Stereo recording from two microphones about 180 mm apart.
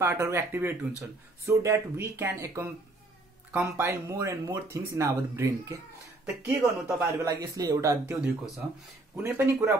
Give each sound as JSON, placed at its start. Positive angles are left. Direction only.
{"t": 0.0, "sound": "speech", "side_deg": -15}